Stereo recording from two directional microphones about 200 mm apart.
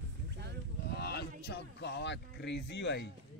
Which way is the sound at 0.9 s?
55° left (ahead or behind).